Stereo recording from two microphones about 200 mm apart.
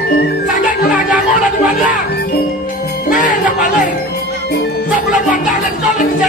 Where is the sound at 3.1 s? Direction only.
40° left (ahead or behind).